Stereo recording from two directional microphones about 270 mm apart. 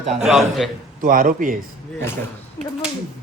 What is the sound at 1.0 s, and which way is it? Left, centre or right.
Speech, right.